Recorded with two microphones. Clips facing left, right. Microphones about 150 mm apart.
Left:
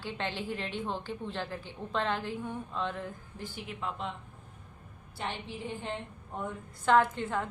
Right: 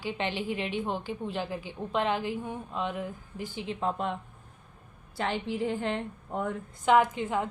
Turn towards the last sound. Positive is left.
turn(degrees=-15)  # may be behind; listen again after turning